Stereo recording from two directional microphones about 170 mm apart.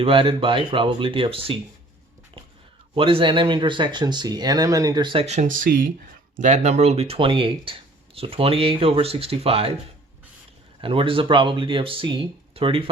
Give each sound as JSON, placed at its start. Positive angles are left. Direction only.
{"t": 0.0, "sound": "speech", "side_deg": -30}
{"t": 2.9, "sound": "speech", "side_deg": -30}
{"t": 6.3, "sound": "speech", "side_deg": -45}
{"t": 10.8, "sound": "speech", "side_deg": -30}